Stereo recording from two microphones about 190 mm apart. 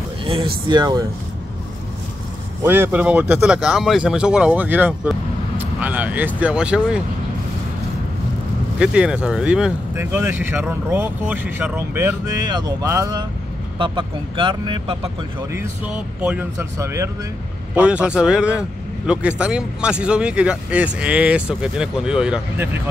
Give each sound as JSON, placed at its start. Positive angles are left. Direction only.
{"t": 0.2, "sound": "a sound", "side_deg": -25}
{"t": 0.7, "sound": "speech", "side_deg": -20}
{"t": 2.6, "sound": "speech", "side_deg": -10}
{"t": 8.7, "sound": "speech", "side_deg": -5}
{"t": 15.9, "sound": "speech", "side_deg": -5}